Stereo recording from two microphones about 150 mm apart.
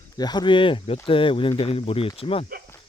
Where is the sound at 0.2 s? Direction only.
30° left (ahead or behind).